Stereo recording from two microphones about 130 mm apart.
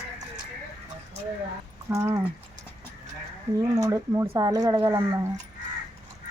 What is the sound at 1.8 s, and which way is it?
Speech, 20° right (ahead or behind).